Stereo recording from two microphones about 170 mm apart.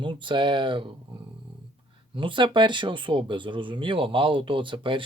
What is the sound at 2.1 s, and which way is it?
Speech, 30° right (ahead or behind).